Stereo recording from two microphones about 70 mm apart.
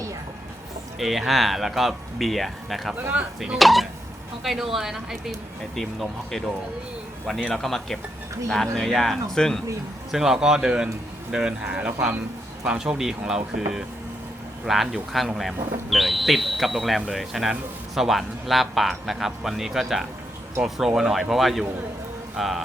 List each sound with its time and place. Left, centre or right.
0.9 s speech: centre
3.1 s speech: centre
3.6 s speech: centre
7.5 s speech: centre
10.1 s speech: centre